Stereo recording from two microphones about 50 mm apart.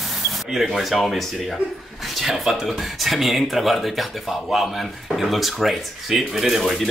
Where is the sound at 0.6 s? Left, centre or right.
Centre.